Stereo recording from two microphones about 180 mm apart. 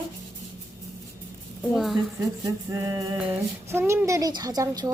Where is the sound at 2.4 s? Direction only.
20° right (ahead or behind).